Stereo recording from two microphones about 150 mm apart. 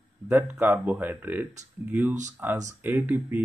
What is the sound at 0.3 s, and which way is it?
Speech, 15° right (ahead or behind).